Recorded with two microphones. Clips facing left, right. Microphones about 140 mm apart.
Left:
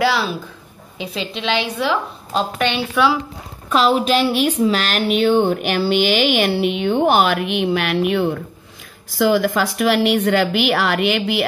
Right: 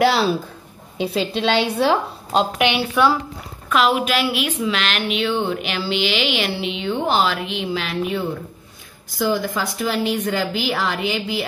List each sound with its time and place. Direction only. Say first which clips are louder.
0.0 s a woman's voice: right 2 dB; 25° right (ahead or behind)
2.9 s speech: left 2 dB; centre (ahead or behind)
3.6 s a woman's voice: left 2 dB; 35° left (ahead or behind)
5.6 s speech: left 5 dB; 50° left (ahead or behind); by 8.3 s 70° left (ahead or behind)
9.1 s a woman's voice: left 5 dB; 80° left